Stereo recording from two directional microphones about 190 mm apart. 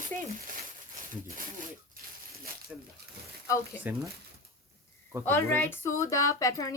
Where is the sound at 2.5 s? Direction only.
50° right (ahead or behind).